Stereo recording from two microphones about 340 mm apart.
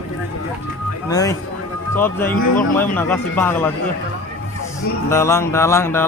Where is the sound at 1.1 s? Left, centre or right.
Centre.